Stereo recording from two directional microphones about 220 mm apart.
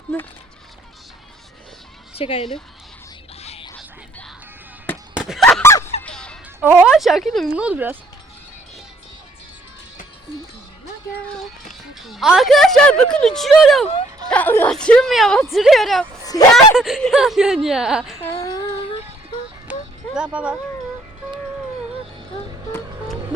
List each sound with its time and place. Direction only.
2.1 s speech: 25° left (ahead or behind)
3.4 s music: 30° left (ahead or behind)
5.1 s a sound: centre (ahead or behind)
6.0 s music: 5° left (ahead or behind)
6.6 s a woman's voice: 5° right (ahead or behind)
11.9 s a woman's voice: centre (ahead or behind)
18.2 s a sound: 15° left (ahead or behind)
19.7 s music: 5° right (ahead or behind)
20.1 s a woman's voice: 5° right (ahead or behind)